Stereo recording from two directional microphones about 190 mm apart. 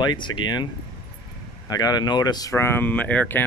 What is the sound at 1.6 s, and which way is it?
Speech, 20° left (ahead or behind).